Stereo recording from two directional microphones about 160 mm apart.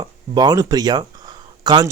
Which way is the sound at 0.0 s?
25° right (ahead or behind).